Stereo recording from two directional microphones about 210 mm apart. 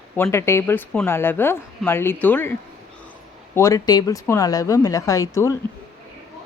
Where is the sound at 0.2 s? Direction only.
10° left (ahead or behind).